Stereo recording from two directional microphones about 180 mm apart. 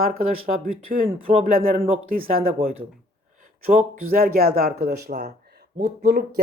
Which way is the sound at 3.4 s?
50° right (ahead or behind).